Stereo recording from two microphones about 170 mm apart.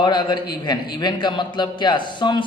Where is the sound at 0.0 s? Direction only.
25° left (ahead or behind).